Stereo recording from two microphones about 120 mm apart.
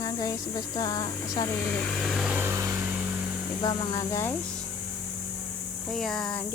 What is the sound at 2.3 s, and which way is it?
Vehicle, 20° right (ahead or behind).